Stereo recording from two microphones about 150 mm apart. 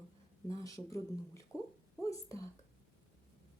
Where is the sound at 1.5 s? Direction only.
5° right (ahead or behind).